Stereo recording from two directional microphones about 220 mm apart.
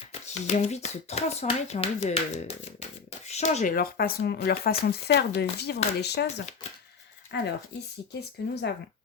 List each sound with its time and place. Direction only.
0.1 s speech: 30° left (ahead or behind); by 6.2 s 50° left (ahead or behind)
7.3 s speech: 45° left (ahead or behind)